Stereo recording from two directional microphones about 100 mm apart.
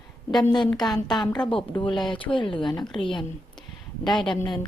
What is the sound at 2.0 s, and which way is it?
A woman's voice, 55° left (ahead or behind).